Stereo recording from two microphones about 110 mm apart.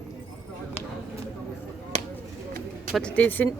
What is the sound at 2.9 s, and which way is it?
Speech, 10° left (ahead or behind).